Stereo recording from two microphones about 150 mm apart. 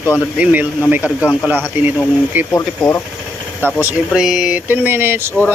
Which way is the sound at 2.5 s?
20° left (ahead or behind).